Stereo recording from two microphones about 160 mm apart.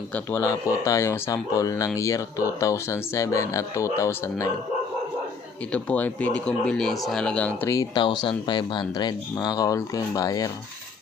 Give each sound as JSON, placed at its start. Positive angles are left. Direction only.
{"t": 0.1, "sound": "speech", "side_deg": 10}
{"t": 5.7, "sound": "speech", "side_deg": 10}
{"t": 7.7, "sound": "speech", "side_deg": 25}